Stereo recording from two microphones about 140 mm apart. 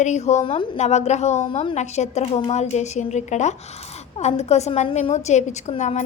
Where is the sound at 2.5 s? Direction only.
55° left (ahead or behind).